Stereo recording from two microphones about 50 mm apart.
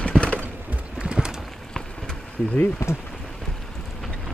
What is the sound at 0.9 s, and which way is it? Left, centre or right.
Horse, centre.